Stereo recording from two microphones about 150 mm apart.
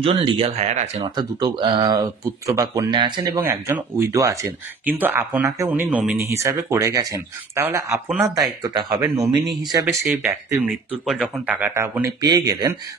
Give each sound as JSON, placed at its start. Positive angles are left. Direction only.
{"t": 0.0, "sound": "speech", "side_deg": -35}
{"t": 1.0, "sound": "speech", "side_deg": -30}
{"t": 3.3, "sound": "speech", "side_deg": -15}
{"t": 8.1, "sound": "speech", "side_deg": 0}
{"t": 9.6, "sound": "speech", "side_deg": -25}
{"t": 10.0, "sound": "speech", "side_deg": -15}
{"t": 11.1, "sound": "speech", "side_deg": 0}
{"t": 12.2, "sound": "speech", "side_deg": -25}